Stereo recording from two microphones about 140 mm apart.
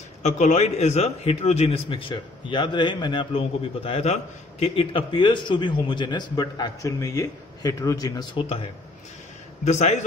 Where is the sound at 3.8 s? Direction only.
45° left (ahead or behind); by 8.4 s 25° left (ahead or behind).